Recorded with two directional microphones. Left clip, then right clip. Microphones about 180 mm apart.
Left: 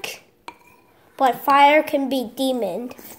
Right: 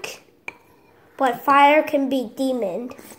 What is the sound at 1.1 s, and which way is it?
A child's voice, 15° left (ahead or behind).